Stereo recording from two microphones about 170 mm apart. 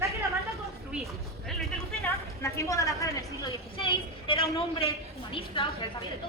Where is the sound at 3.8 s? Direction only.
35° left (ahead or behind).